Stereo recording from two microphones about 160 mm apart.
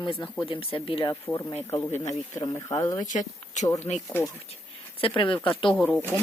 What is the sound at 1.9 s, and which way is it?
Speech, 45° left (ahead or behind).